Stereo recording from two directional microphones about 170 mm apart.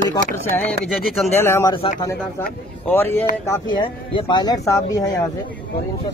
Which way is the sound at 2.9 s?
10° left (ahead or behind).